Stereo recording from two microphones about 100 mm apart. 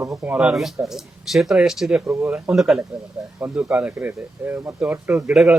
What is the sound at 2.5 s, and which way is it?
A man's voice, centre (ahead or behind).